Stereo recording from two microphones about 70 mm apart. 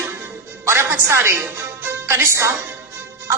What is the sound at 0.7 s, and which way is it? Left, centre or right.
A woman's voice, right.